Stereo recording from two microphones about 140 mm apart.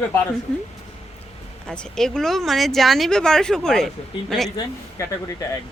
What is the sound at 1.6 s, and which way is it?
Speech, 5° left (ahead or behind).